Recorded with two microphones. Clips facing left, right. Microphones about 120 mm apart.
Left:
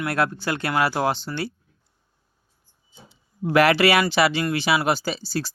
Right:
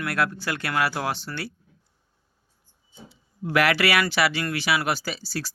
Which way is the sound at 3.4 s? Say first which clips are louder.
Left 5 dB; 30° left (ahead or behind).